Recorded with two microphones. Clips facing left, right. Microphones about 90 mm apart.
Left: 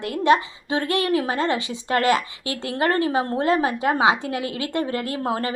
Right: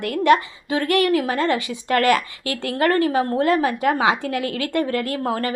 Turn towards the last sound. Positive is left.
turn(degrees=25)  # may be behind; listen again after turning